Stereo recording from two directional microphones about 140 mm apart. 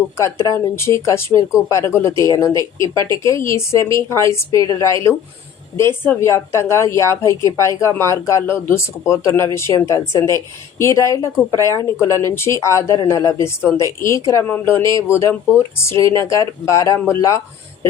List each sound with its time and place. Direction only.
0.2 s speech: 20° left (ahead or behind)
5.7 s speech: 15° left (ahead or behind)